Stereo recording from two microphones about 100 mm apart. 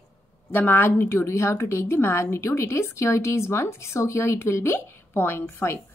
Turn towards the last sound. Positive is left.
turn(degrees=25)  # may be behind; listen again after turning